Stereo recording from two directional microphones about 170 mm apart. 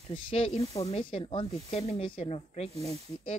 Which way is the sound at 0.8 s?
35° left (ahead or behind).